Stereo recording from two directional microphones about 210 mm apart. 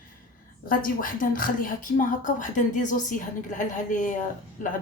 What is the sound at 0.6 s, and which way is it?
A woman's voice, 40° left (ahead or behind).